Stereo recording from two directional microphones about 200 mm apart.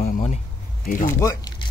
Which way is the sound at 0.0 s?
35° left (ahead or behind).